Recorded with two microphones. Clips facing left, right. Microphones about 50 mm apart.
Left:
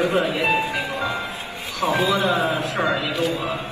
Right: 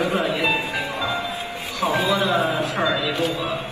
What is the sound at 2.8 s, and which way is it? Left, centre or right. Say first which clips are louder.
Speech: left 1 dB; left.